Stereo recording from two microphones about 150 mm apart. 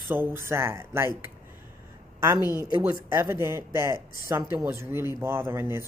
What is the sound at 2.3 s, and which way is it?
Speech, 25° left (ahead or behind).